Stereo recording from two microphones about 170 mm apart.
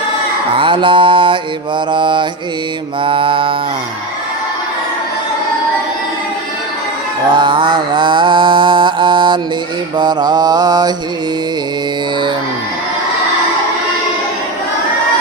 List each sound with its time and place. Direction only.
0.5 s mantra: 30° right (ahead or behind)
7.3 s mantra: 30° right (ahead or behind)